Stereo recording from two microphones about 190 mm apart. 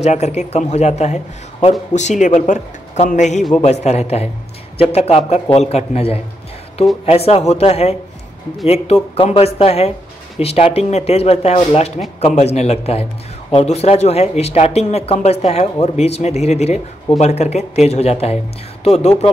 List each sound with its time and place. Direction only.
0.0 s a man's voice: 35° left (ahead or behind)